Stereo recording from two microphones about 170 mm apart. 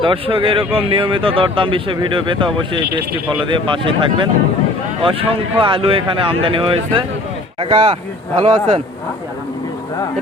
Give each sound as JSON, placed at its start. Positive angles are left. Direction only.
{"t": 0.0, "sound": "speech", "side_deg": -30}